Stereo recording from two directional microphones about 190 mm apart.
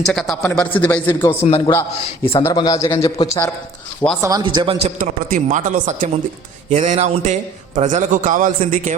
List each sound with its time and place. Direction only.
0.0 s speech: centre (ahead or behind)
1.5 s a man's voice: 30° left (ahead or behind)
2.4 s speech: 20° left (ahead or behind)
4.2 s a man's voice: 20° right (ahead or behind)
4.9 s a man's voice: 45° right (ahead or behind)